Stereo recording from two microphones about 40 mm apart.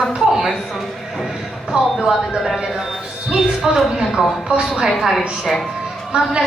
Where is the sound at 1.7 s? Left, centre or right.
Right.